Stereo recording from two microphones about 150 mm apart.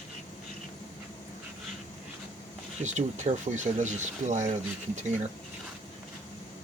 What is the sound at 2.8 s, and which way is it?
Speech, 50° right (ahead or behind).